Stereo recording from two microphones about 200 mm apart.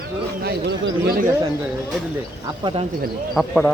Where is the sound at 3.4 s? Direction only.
Centre (ahead or behind).